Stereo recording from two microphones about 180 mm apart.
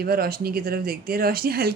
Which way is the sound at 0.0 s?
60° right (ahead or behind).